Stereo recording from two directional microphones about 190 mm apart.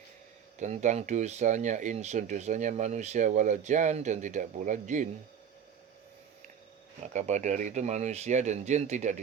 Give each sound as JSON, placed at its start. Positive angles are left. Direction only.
{"t": 0.6, "sound": "speech", "side_deg": -40}
{"t": 7.0, "sound": "speech", "side_deg": -40}